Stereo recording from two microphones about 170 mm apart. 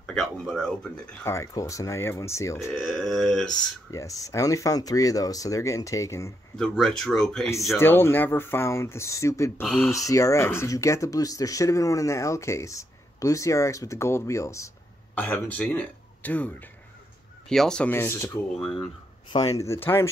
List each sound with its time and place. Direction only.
0.0 s speech: 5° left (ahead or behind)
1.3 s speech: 20° left (ahead or behind)
2.7 s speech: 5° left (ahead or behind)
3.9 s speech: 20° left (ahead or behind)
6.5 s speech: centre (ahead or behind)
7.7 s speech: 15° left (ahead or behind)
9.6 s speech: centre (ahead or behind)
9.8 s speech: 20° left (ahead or behind)
18.6 s speech: 5° left (ahead or behind)
19.3 s speech: 20° left (ahead or behind)